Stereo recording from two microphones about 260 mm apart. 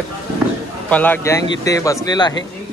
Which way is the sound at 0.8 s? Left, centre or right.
Centre.